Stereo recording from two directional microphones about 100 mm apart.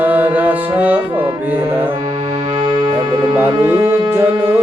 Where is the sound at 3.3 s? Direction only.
25° right (ahead or behind).